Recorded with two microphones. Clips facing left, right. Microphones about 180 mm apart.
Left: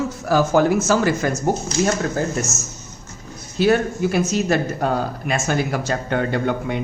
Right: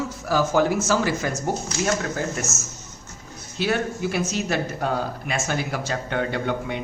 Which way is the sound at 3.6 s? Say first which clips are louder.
Left 7 dB; 45° left (ahead or behind).